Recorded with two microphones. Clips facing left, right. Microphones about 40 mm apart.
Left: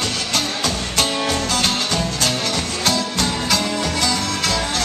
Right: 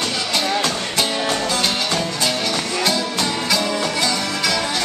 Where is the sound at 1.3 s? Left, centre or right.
Right.